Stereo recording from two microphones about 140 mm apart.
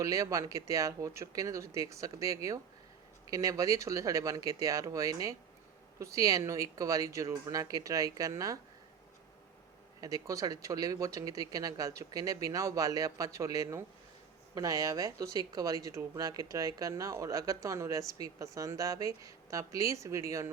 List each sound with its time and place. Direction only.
0.0 s speech: 25° right (ahead or behind)
10.0 s speech: 25° right (ahead or behind)